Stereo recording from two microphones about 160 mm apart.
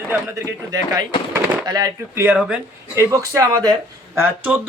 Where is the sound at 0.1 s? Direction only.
15° right (ahead or behind).